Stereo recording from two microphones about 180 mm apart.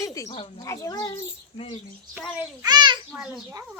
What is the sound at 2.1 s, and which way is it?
Speech, 10° right (ahead or behind).